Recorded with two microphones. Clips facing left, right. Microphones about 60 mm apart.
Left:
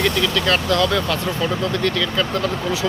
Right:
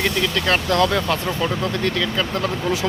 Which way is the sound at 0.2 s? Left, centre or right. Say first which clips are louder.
Left 1 dB; right.